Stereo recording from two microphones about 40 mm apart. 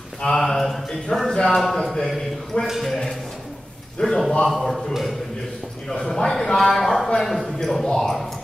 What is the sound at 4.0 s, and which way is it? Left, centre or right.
Speech, centre.